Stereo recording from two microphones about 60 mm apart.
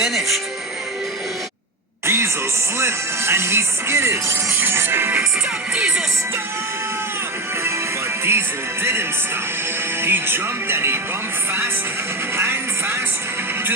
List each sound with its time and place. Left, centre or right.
0.0 s speech: centre
2.0 s music: right
2.7 s speech: right
5.7 s music: centre
8.2 s speech: right
12.4 s speech: right